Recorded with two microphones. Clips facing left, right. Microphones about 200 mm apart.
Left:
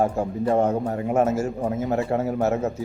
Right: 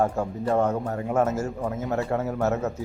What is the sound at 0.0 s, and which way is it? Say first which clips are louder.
A man's voice: left 2 dB; 25° left (ahead or behind).